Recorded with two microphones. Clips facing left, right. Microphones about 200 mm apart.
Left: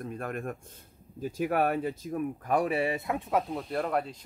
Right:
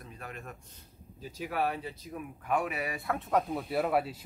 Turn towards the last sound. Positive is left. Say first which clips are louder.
# right 1 dB
turn(degrees=-5)  # may be behind; listen again after turning